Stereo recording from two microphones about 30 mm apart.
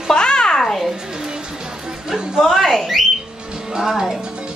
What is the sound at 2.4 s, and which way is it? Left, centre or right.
Speech, centre.